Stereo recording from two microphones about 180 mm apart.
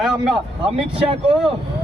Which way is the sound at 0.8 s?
30° right (ahead or behind).